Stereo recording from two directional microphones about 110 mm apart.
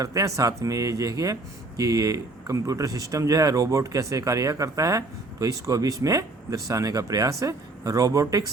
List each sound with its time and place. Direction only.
0.0 s speech: 30° right (ahead or behind)